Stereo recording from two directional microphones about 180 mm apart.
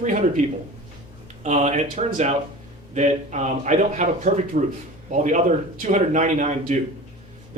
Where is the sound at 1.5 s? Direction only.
40° right (ahead or behind).